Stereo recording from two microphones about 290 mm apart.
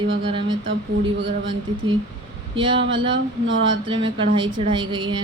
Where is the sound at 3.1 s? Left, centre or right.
Right.